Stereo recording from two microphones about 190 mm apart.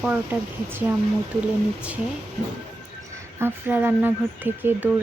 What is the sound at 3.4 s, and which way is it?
Speech, 10° right (ahead or behind).